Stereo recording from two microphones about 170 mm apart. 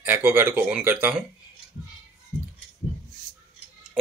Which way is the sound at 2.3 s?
25° left (ahead or behind).